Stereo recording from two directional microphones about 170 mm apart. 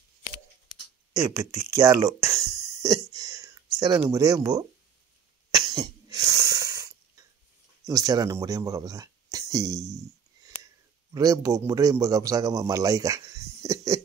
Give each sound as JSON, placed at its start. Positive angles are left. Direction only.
{"t": 1.1, "sound": "a sound", "side_deg": -20}
{"t": 3.7, "sound": "a man's voice", "side_deg": -20}
{"t": 5.7, "sound": "cough", "side_deg": -20}
{"t": 7.8, "sound": "speech", "side_deg": -20}
{"t": 11.1, "sound": "a man's voice", "side_deg": -20}
{"t": 13.6, "sound": "a sound", "side_deg": -20}